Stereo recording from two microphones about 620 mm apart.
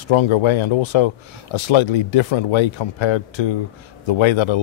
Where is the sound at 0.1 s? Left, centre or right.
Left.